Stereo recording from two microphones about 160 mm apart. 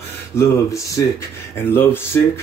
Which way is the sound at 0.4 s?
20° left (ahead or behind).